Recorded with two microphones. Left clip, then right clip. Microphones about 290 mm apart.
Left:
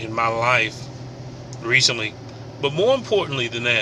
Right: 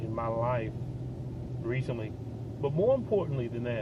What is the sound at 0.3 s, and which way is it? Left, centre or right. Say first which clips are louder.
Speech: left 13 dB; centre.